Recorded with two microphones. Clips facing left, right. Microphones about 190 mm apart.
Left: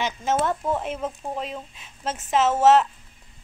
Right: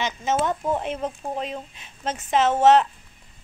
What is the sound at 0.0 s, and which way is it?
A woman's voice, 5° left (ahead or behind).